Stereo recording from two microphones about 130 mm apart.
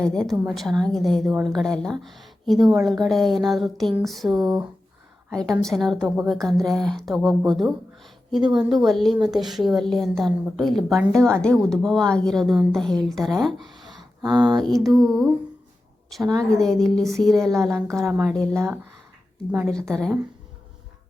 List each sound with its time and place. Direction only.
0.0 s a woman's voice: 5° left (ahead or behind)
16.4 s a woman's voice: 5° left (ahead or behind)
17.5 s speech: 20° right (ahead or behind)
18.0 s a woman's voice: 10° right (ahead or behind)
18.5 s speech: 20° right (ahead or behind)